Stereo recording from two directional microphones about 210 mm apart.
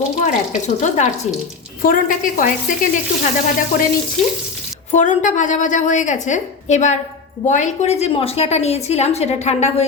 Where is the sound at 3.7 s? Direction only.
40° left (ahead or behind).